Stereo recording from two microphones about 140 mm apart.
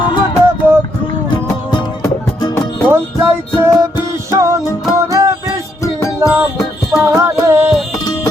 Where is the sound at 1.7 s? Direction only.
30° left (ahead or behind).